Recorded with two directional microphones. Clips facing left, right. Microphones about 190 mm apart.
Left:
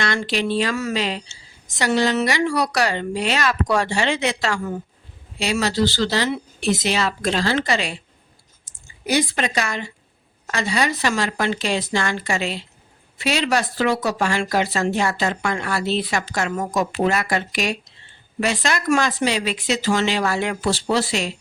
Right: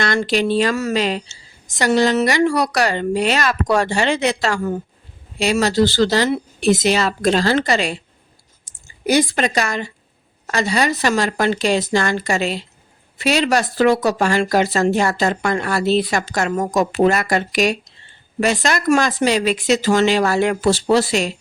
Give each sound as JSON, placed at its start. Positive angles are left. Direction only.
{"t": 0.0, "sound": "speech", "side_deg": -45}
{"t": 9.0, "sound": "speech", "side_deg": -45}